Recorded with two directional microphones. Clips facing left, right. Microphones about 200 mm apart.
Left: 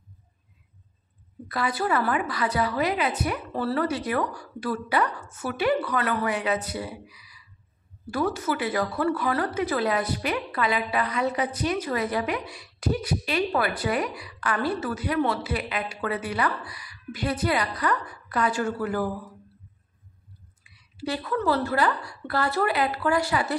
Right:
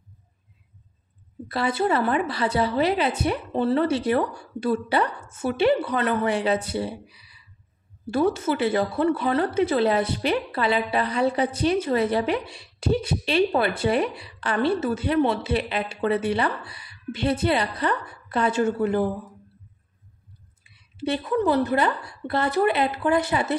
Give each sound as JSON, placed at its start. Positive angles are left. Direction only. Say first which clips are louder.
{"t": 1.5, "sound": "a woman's voice", "louder": "right 3 dB", "side_deg": -25}
{"t": 20.6, "sound": "a woman's voice", "louder": "right 4 dB", "side_deg": -25}